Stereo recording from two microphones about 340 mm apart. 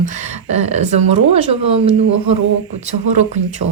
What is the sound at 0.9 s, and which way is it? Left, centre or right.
Speech, right.